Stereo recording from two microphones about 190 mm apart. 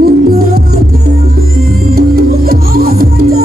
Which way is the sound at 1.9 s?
50° right (ahead or behind).